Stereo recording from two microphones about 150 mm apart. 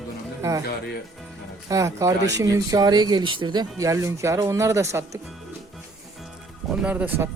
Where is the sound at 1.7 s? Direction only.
20° right (ahead or behind).